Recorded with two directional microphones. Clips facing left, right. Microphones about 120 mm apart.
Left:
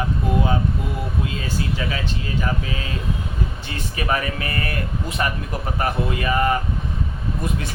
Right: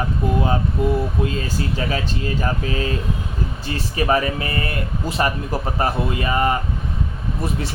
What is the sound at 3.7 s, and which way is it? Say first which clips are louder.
Speech: right 5 dB; 30° right (ahead or behind).